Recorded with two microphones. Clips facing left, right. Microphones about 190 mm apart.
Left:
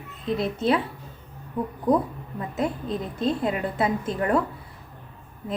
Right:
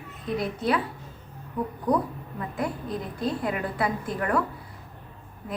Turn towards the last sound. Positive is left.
turn(degrees=25)  # may be behind; listen again after turning